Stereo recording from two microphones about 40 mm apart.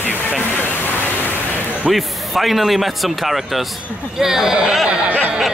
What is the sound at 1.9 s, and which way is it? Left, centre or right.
Speech, centre.